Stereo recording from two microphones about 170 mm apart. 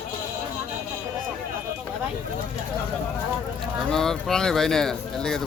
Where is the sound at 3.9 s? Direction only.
5° left (ahead or behind).